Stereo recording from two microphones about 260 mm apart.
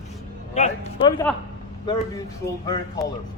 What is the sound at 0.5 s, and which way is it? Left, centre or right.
Speech, left.